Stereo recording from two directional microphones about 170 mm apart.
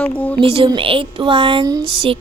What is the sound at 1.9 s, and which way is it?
Music, 30° right (ahead or behind).